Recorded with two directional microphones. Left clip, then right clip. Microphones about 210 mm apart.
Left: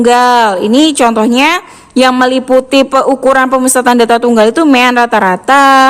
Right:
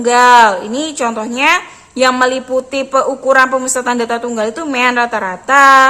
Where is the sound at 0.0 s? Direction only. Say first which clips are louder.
Even; 45° left (ahead or behind).